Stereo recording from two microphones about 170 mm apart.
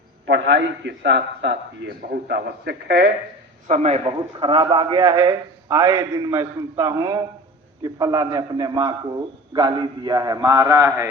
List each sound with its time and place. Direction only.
0.3 s a man's voice: 90° right
2.0 s a man's voice: 65° right (ahead or behind)
3.7 s a man's voice: 40° right (ahead or behind)
4.0 s a man's voice: 30° right (ahead or behind)